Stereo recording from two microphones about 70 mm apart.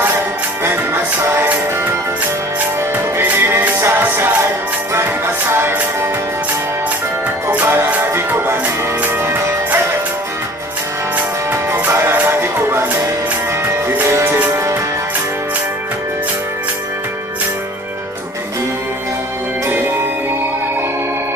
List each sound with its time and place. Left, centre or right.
1.3 s music: right
3.2 s music: right
7.5 s music: right
11.5 s music: right